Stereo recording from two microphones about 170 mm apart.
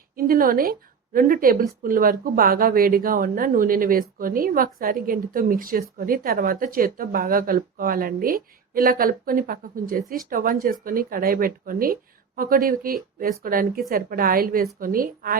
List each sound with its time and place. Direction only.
0.2 s a woman's voice: 60° right (ahead or behind)